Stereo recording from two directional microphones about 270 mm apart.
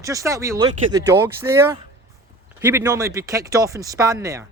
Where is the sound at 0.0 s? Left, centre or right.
Centre.